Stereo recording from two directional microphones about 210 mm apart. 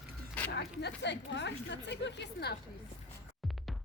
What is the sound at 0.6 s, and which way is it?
A woman's voice, 55° left (ahead or behind).